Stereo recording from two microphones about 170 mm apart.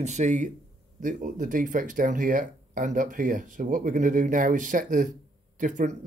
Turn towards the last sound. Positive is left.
turn(degrees=-50)  # may be behind; listen again after turning